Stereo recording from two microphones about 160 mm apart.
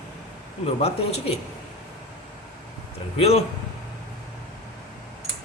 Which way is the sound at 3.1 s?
40° left (ahead or behind).